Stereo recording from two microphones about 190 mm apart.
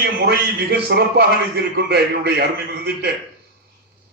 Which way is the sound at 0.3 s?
55° right (ahead or behind).